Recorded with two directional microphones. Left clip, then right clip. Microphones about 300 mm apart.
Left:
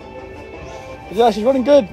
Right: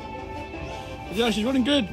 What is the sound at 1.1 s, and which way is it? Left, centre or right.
Speech, centre.